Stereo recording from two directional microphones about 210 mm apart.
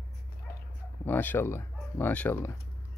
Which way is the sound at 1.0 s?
10° left (ahead or behind).